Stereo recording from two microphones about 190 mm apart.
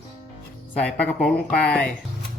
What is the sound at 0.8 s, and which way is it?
Speech, 5° left (ahead or behind).